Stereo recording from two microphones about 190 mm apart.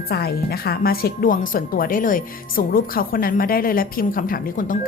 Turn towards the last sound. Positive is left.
turn(degrees=45)  # may be behind; listen again after turning